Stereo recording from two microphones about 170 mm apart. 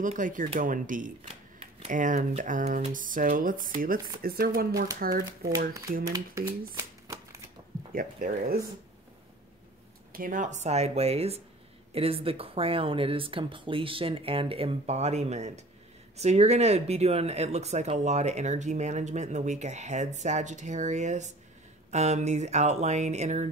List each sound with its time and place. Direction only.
0.0 s speech: 50° right (ahead or behind)
1.2 s speech: 35° right (ahead or behind); by 5.5 s 60° right (ahead or behind)
6.0 s speech: 20° right (ahead or behind)
6.7 s shuffling cards: 20° right (ahead or behind)
7.9 s speech: 55° right (ahead or behind)
10.1 s speech: 50° right (ahead or behind)